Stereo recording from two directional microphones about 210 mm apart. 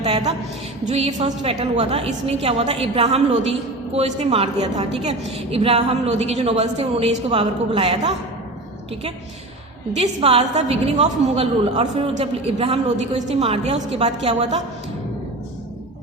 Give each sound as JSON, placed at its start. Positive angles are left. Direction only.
{"t": 0.0, "sound": "a sound", "side_deg": -25}
{"t": 0.9, "sound": "a woman's voice", "side_deg": -30}
{"t": 10.2, "sound": "a woman's voice", "side_deg": -30}